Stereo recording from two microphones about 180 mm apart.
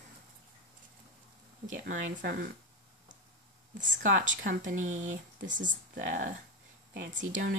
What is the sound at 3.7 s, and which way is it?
A woman's voice, 45° right (ahead or behind).